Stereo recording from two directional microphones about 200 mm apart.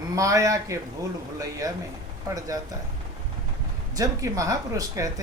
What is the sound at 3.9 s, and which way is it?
Speech, 15° right (ahead or behind).